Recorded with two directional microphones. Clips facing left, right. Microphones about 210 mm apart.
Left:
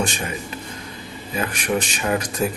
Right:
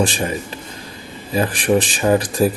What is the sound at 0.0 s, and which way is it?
Speech, 35° right (ahead or behind).